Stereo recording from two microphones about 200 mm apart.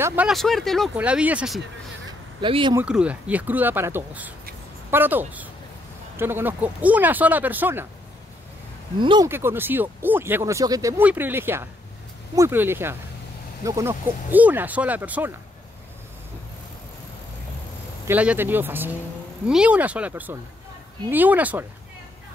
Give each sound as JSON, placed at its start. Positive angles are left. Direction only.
{"t": 0.0, "sound": "speech", "side_deg": -10}
{"t": 2.0, "sound": "a sound", "side_deg": -25}
{"t": 2.8, "sound": "speech", "side_deg": -5}
{"t": 9.0, "sound": "speech", "side_deg": -25}
{"t": 9.3, "sound": "speech", "side_deg": -10}
{"t": 18.0, "sound": "speech", "side_deg": -10}